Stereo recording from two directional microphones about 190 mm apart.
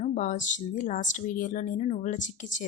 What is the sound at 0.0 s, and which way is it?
A woman's voice, 40° left (ahead or behind).